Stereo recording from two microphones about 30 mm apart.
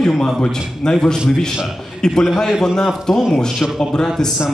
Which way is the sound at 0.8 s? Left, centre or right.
Left.